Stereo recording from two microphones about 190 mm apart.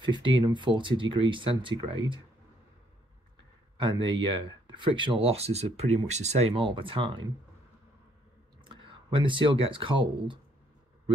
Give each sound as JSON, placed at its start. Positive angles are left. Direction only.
{"t": 0.0, "sound": "speech", "side_deg": -25}
{"t": 3.7, "sound": "speech", "side_deg": -25}
{"t": 8.6, "sound": "speech", "side_deg": -25}